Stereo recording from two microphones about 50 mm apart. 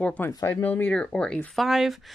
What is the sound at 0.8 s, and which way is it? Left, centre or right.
Speech, left.